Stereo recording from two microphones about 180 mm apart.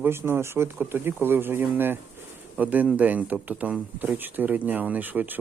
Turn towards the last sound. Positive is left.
turn(degrees=-10)  # may be behind; listen again after turning